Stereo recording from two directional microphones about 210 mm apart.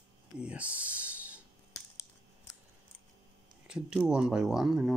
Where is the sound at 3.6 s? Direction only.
5° right (ahead or behind).